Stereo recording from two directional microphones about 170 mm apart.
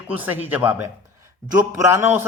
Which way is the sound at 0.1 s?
10° right (ahead or behind).